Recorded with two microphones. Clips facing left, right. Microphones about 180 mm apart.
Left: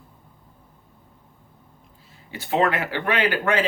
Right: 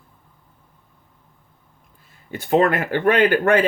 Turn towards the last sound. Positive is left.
turn(degrees=-55)  # may be behind; listen again after turning